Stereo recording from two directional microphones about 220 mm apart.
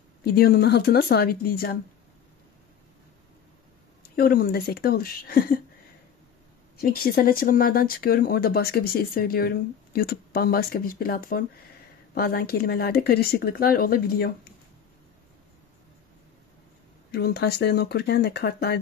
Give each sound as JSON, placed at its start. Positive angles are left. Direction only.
{"t": 0.2, "sound": "speech", "side_deg": 45}
{"t": 4.0, "sound": "speech", "side_deg": 40}
{"t": 6.8, "sound": "speech", "side_deg": 45}
{"t": 17.1, "sound": "speech", "side_deg": 45}